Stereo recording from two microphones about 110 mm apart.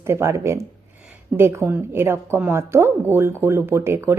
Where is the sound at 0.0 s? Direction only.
25° right (ahead or behind).